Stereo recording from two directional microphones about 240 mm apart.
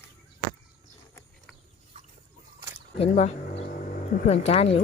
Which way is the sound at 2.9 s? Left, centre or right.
Left.